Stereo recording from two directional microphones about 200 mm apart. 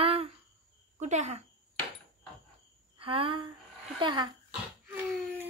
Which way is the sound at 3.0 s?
25° right (ahead or behind).